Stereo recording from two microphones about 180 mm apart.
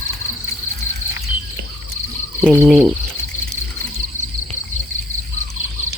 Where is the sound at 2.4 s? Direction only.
5° left (ahead or behind).